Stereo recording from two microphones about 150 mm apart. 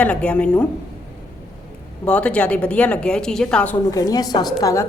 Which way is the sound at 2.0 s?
10° left (ahead or behind).